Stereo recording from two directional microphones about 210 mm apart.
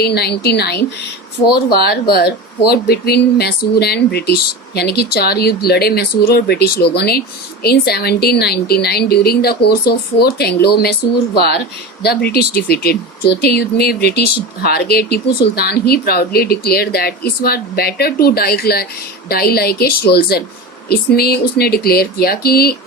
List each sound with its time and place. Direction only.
0.0 s speech: 50° left (ahead or behind)